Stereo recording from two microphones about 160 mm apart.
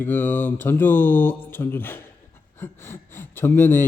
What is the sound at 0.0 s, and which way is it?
Speech, 10° left (ahead or behind).